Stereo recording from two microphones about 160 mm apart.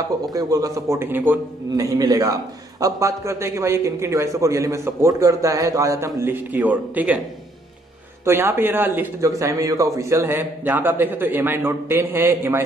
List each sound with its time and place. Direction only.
0.2 s a man's voice: 25° right (ahead or behind)
2.0 s a man's voice: 25° right (ahead or behind)
8.3 s a man's voice: 15° right (ahead or behind)